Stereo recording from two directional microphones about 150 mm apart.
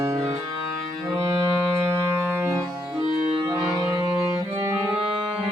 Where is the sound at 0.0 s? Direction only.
20° right (ahead or behind).